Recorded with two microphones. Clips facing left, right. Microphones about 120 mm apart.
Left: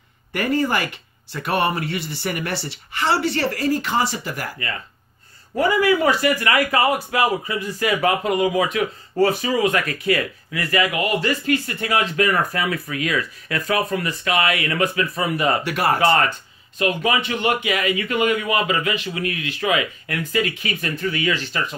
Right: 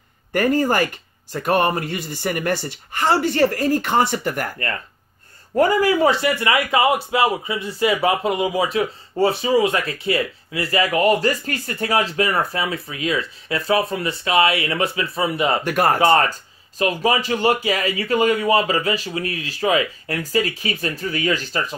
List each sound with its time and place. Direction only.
0.3 s speech: 45° right (ahead or behind)
5.6 s a man's voice: 40° right (ahead or behind)
15.6 s speech: 50° right (ahead or behind)
16.1 s speech: 35° right (ahead or behind)